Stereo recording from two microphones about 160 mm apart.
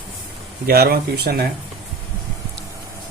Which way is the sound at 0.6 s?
70° right (ahead or behind).